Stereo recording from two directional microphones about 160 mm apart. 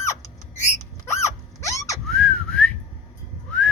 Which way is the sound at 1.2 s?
20° left (ahead or behind).